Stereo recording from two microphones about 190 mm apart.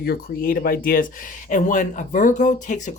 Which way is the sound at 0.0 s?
50° left (ahead or behind).